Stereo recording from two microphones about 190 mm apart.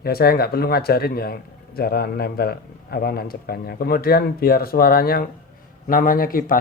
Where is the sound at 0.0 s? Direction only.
55° left (ahead or behind).